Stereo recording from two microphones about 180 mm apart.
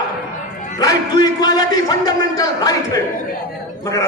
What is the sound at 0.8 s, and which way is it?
A man's voice, 20° left (ahead or behind).